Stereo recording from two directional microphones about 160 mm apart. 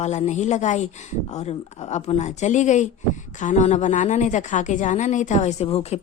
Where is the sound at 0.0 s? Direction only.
45° left (ahead or behind).